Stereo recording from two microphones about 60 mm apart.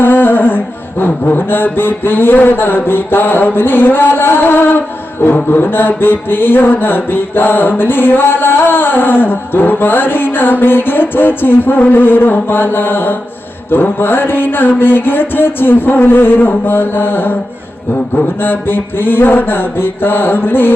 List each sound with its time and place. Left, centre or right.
0.0 s humming: left
5.2 s mantra: left
18.4 s mantra: left